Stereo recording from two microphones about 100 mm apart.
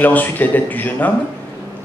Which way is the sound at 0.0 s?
15° left (ahead or behind).